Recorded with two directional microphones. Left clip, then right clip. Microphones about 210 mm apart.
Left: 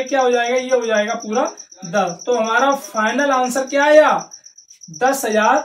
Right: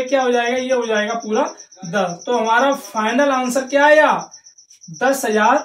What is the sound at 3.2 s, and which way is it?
Speech, 15° right (ahead or behind).